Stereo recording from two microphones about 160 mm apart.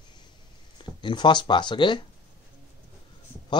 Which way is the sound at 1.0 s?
30° left (ahead or behind).